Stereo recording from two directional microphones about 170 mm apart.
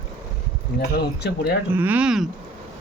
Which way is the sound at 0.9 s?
70° left (ahead or behind).